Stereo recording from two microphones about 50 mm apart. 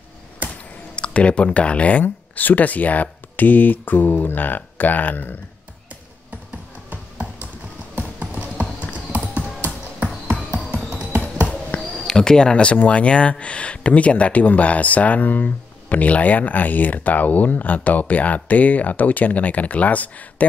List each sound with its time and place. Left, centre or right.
0.9 s speech: left
8.2 s clip-clop: right
11.7 s a sound: left
12.1 s speech: centre; by 20.4 s left